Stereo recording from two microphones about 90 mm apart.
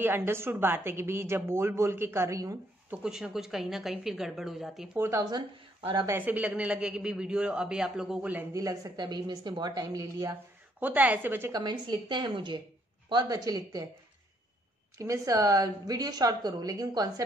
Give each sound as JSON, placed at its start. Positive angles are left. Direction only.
{"t": 0.0, "sound": "a woman's voice", "side_deg": -25}
{"t": 3.0, "sound": "speech", "side_deg": -5}
{"t": 4.9, "sound": "a woman's voice", "side_deg": -30}
{"t": 8.5, "sound": "a woman's voice", "side_deg": -40}
{"t": 10.8, "sound": "a woman's voice", "side_deg": -20}
{"t": 11.5, "sound": "a woman's voice", "side_deg": -50}
{"t": 13.1, "sound": "a woman's voice", "side_deg": -45}
{"t": 15.0, "sound": "a woman's voice", "side_deg": -35}